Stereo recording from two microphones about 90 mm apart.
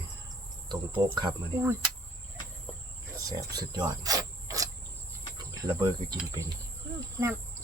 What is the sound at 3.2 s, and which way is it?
Cricket, 40° right (ahead or behind).